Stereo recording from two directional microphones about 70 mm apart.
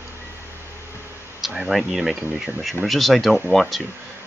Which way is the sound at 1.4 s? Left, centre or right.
Centre.